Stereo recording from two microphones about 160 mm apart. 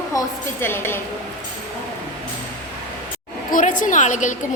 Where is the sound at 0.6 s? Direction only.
15° left (ahead or behind).